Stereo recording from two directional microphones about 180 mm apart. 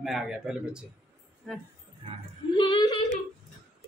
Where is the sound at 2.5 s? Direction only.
25° left (ahead or behind).